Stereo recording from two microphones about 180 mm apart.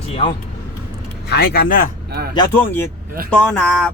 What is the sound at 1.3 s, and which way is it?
Speech, 60° left (ahead or behind).